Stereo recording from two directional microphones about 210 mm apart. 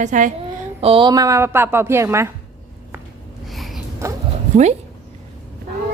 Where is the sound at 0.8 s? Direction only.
25° right (ahead or behind).